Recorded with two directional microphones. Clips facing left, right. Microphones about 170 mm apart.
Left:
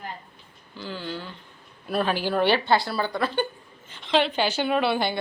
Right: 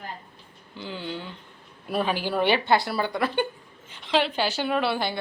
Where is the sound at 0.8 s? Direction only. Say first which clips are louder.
Even; 20° right (ahead or behind).